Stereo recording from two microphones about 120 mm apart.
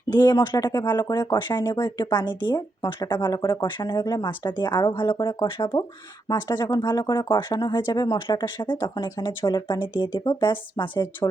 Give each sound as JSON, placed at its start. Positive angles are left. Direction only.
{"t": 0.1, "sound": "speech", "side_deg": 35}